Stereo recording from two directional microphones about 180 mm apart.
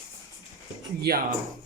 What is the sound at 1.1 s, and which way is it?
Speech, 60° right (ahead or behind).